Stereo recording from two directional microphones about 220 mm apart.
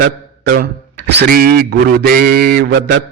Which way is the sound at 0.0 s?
45° right (ahead or behind).